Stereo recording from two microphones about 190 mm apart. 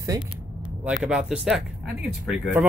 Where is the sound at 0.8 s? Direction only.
5° right (ahead or behind).